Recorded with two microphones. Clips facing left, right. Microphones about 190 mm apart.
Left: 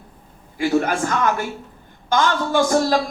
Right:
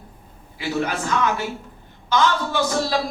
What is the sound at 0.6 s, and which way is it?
A man's voice, 50° left (ahead or behind).